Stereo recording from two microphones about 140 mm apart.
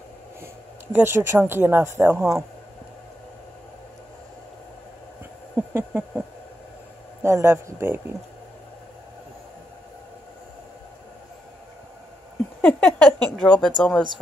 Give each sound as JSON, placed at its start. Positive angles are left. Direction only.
{"t": 0.9, "sound": "speech", "side_deg": -15}
{"t": 5.7, "sound": "a sound", "side_deg": -15}
{"t": 7.2, "sound": "a man's voice", "side_deg": -20}
{"t": 12.6, "sound": "a woman's voice", "side_deg": 10}